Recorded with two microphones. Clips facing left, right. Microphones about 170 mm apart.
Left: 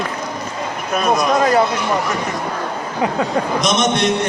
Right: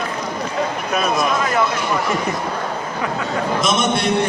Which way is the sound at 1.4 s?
35° left (ahead or behind).